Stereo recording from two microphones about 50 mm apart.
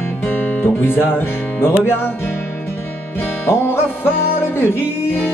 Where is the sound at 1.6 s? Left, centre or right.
Left.